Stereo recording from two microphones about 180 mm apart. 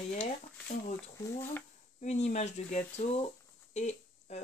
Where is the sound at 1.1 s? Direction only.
15° left (ahead or behind).